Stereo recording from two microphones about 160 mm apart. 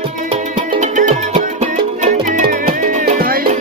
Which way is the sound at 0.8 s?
50° right (ahead or behind).